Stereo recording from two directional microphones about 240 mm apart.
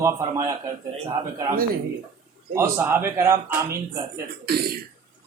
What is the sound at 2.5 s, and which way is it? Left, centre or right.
Speech, centre.